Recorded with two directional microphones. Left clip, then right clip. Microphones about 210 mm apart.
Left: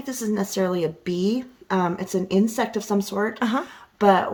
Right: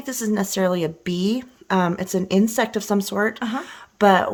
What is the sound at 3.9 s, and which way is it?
Speech, 45° right (ahead or behind).